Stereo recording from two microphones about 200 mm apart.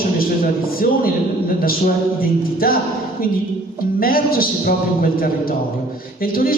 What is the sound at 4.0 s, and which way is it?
A man's voice, 45° left (ahead or behind).